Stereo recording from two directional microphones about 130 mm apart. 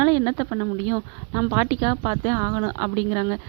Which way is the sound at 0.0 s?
30° right (ahead or behind).